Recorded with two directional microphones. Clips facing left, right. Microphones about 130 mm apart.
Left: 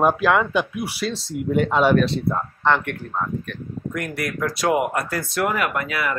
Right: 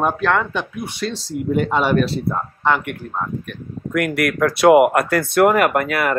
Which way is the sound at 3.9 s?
75° right (ahead or behind).